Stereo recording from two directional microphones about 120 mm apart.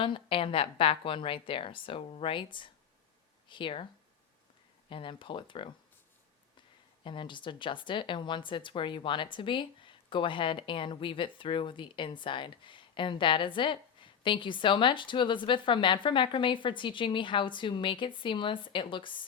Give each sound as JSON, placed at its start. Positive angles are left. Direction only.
{"t": 0.0, "sound": "speech", "side_deg": 45}
{"t": 4.9, "sound": "speech", "side_deg": 45}
{"t": 7.0, "sound": "speech", "side_deg": 45}